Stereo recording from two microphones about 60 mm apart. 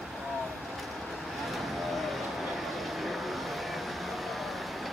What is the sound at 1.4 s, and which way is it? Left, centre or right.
Vehicle, centre.